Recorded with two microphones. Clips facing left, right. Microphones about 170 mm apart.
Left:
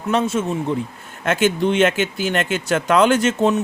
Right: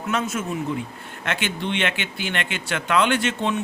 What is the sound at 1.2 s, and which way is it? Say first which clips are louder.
Speech: left 9 dB; 45° left (ahead or behind).